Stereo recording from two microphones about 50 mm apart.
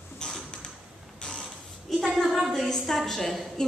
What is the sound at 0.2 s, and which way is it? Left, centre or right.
Mechanisms, centre.